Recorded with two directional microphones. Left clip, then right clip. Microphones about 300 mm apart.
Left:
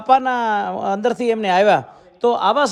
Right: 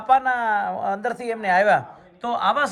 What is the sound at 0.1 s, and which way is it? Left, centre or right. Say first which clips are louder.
Speech: left 3 dB; left.